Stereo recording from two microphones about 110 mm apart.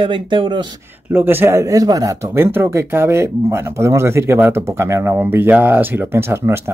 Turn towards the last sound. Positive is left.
turn(degrees=-20)  # may be behind; listen again after turning